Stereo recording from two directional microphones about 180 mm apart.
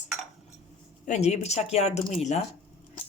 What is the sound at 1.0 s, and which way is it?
Speech, 40° left (ahead or behind).